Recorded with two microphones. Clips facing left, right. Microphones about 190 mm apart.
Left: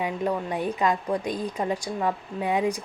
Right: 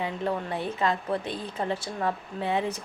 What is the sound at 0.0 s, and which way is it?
Speech, 15° left (ahead or behind).